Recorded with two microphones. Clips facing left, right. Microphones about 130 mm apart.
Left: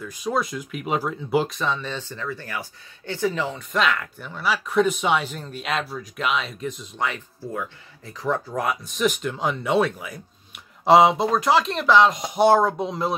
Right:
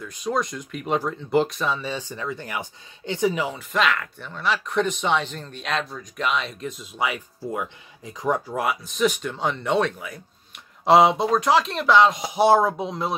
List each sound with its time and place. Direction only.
0.0 s speech: 5° left (ahead or behind)
3.7 s speech: centre (ahead or behind)
7.5 s speech: 15° right (ahead or behind)
8.6 s speech: centre (ahead or behind)